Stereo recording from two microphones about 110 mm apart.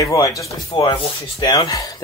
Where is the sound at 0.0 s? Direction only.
30° left (ahead or behind).